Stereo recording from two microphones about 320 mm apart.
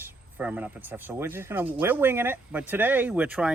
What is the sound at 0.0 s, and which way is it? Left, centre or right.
Speech, centre.